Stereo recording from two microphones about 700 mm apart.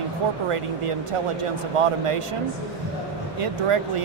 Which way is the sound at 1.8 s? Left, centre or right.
Right.